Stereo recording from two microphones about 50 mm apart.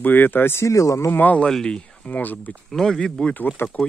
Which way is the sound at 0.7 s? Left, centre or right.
Left.